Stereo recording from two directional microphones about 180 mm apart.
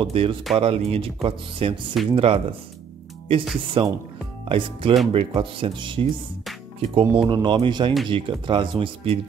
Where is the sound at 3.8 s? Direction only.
30° right (ahead or behind).